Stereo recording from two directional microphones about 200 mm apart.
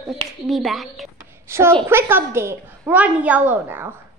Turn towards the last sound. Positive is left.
turn(degrees=-10)  # may be behind; listen again after turning